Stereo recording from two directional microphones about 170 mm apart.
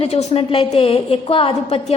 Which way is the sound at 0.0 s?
35° left (ahead or behind).